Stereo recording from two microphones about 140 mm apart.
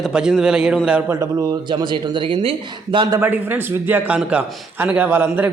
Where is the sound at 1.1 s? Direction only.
25° right (ahead or behind).